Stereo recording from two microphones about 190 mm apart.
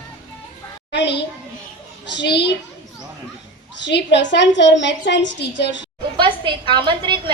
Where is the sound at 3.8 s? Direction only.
70° left (ahead or behind).